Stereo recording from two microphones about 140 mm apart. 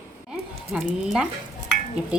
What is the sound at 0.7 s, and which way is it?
Speech, 5° right (ahead or behind).